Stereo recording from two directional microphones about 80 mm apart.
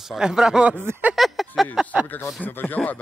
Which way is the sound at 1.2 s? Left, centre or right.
Centre.